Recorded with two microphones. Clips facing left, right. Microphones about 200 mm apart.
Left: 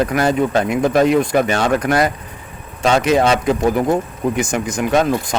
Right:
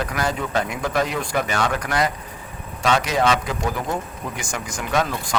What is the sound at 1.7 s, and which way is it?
Speech, 50° left (ahead or behind).